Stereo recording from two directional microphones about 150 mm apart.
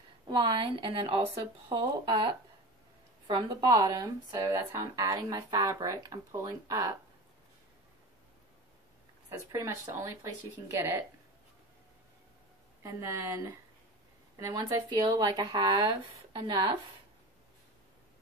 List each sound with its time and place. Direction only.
0.3 s speech: 35° right (ahead or behind)
9.5 s a woman's voice: 20° right (ahead or behind)
12.8 s a woman's voice: 15° right (ahead or behind)
14.4 s speech: 30° right (ahead or behind)